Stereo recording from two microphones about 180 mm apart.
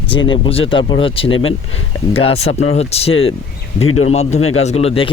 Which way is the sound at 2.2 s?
35° left (ahead or behind).